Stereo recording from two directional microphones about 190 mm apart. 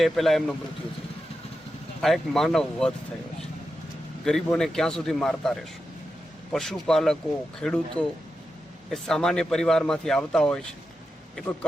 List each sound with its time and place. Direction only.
0.0 s speech: centre (ahead or behind)
2.0 s speech: centre (ahead or behind)
4.3 s speech: centre (ahead or behind)